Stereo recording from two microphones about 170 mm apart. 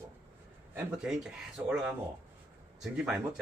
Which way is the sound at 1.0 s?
Centre (ahead or behind).